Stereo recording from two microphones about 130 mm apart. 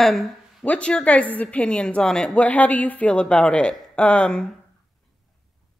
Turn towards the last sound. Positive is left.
turn(degrees=5)  # may be behind; listen again after turning